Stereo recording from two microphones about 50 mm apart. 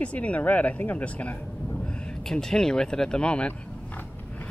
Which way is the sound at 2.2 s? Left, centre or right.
Centre.